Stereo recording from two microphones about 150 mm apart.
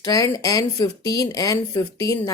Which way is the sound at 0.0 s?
20° left (ahead or behind).